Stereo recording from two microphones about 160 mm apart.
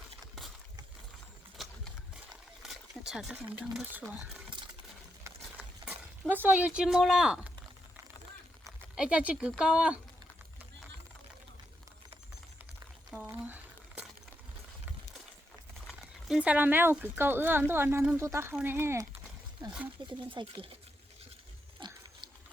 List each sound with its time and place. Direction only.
2.6 s speech: centre (ahead or behind)
5.2 s a sound: 10° right (ahead or behind)
8.6 s speech: 5° right (ahead or behind)
13.2 s a sound: 15° right (ahead or behind)
15.9 s speech: centre (ahead or behind); by 20.7 s 30° right (ahead or behind)
21.8 s pig: 30° right (ahead or behind)